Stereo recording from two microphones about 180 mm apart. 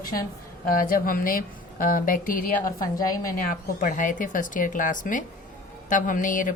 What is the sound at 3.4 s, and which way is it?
A woman's voice, 50° left (ahead or behind).